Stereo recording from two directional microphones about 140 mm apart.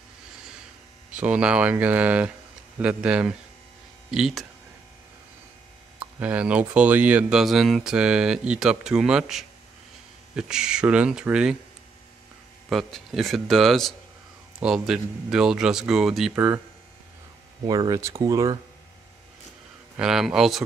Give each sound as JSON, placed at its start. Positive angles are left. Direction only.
{"t": 1.1, "sound": "a man's voice", "side_deg": -10}
{"t": 5.9, "sound": "a man's voice", "side_deg": -10}
{"t": 12.6, "sound": "a man's voice", "side_deg": 0}
{"t": 16.3, "sound": "speech", "side_deg": -15}
{"t": 17.6, "sound": "speech", "side_deg": -30}
{"t": 20.0, "sound": "a man's voice", "side_deg": -5}